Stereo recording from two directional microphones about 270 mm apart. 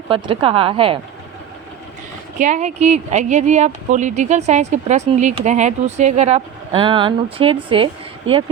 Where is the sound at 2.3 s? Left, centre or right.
Right.